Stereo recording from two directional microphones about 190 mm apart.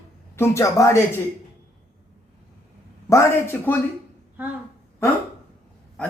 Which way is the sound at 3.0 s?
15° left (ahead or behind).